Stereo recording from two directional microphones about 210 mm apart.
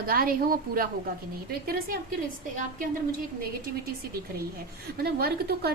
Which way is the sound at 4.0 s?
45° right (ahead or behind).